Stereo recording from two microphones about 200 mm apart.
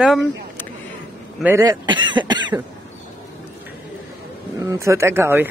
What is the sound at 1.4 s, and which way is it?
Speech, 15° right (ahead or behind).